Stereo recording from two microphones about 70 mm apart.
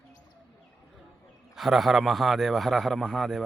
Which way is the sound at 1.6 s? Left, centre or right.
Centre.